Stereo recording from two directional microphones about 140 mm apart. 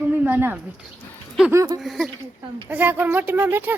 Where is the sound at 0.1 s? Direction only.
15° right (ahead or behind).